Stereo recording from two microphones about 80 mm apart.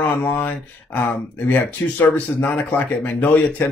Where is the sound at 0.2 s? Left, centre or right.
Left.